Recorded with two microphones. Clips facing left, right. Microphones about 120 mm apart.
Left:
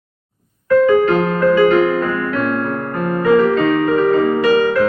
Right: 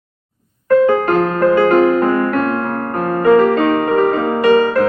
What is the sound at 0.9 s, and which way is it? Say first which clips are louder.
Music: left 1 dB; 50° right (ahead or behind).